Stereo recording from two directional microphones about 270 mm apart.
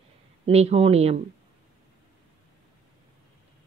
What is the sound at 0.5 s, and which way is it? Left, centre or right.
Speech, right.